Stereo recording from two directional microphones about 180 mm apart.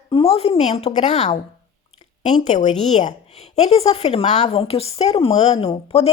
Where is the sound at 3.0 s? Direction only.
40° left (ahead or behind).